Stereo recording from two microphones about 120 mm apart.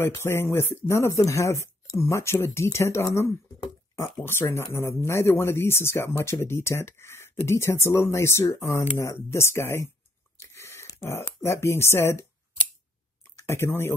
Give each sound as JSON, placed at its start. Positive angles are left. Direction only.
{"t": 0.0, "sound": "speech", "side_deg": 20}
{"t": 10.3, "sound": "a sound", "side_deg": 25}
{"t": 13.4, "sound": "speech", "side_deg": 20}